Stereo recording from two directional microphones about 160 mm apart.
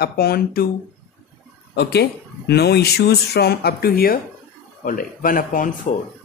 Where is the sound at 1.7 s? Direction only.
90° left; by 5.7 s 55° left (ahead or behind).